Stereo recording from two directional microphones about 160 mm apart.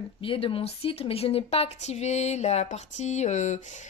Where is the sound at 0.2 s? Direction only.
35° left (ahead or behind).